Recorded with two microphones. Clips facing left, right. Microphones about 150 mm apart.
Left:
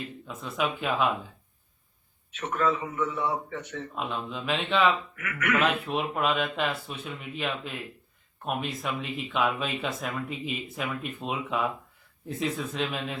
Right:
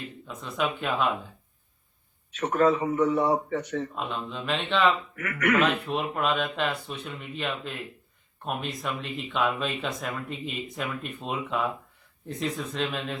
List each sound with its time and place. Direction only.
0.0 s speech: centre (ahead or behind)
2.3 s a man's voice: 40° right (ahead or behind)
3.9 s speech: centre (ahead or behind)
5.1 s a man's voice: 40° right (ahead or behind)
5.6 s speech: centre (ahead or behind)